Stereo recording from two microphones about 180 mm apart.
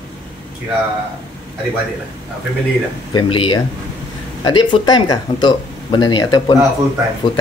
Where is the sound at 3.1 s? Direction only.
25° left (ahead or behind).